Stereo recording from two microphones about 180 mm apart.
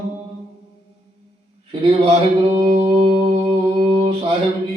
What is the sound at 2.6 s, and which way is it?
Music, 25° right (ahead or behind).